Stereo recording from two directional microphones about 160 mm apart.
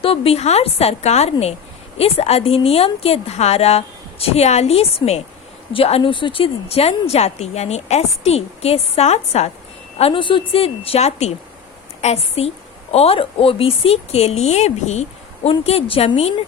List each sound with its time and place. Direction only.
0.0 s speech: 35° left (ahead or behind)
10.0 s speech: 30° left (ahead or behind)